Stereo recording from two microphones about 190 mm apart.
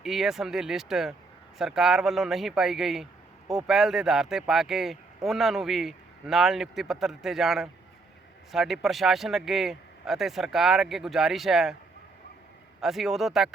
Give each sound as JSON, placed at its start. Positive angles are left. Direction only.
{"t": 0.0, "sound": "speech", "side_deg": 0}
{"t": 12.8, "sound": "speech", "side_deg": 0}